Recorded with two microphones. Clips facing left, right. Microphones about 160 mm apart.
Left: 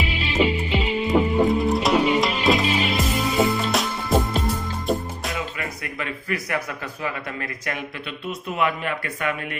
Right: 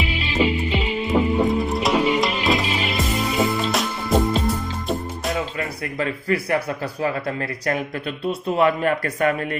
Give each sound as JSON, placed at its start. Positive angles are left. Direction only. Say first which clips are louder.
{"t": 0.2, "sound": "music", "louder": "even", "side_deg": 0}
{"t": 5.5, "sound": "speech", "louder": "right 5 dB", "side_deg": -30}